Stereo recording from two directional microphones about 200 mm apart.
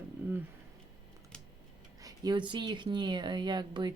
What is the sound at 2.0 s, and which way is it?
Speech, 20° right (ahead or behind).